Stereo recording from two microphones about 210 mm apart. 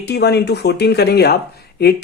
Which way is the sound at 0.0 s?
50° left (ahead or behind).